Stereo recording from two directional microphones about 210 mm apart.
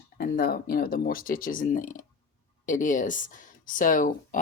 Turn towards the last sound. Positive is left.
turn(degrees=40)  # may be behind; listen again after turning